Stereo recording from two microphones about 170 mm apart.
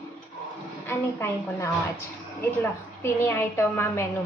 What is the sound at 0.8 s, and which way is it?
A woman's voice, 15° left (ahead or behind).